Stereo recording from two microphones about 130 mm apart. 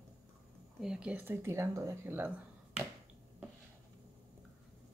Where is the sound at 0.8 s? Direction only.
5° right (ahead or behind).